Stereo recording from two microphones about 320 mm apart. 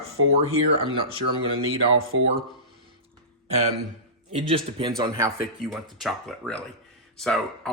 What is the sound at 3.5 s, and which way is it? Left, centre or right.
A man's voice, right.